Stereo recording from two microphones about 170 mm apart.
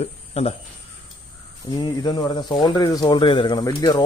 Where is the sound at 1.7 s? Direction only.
25° left (ahead or behind).